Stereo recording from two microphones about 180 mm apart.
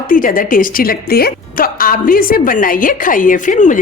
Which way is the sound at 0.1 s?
50° left (ahead or behind).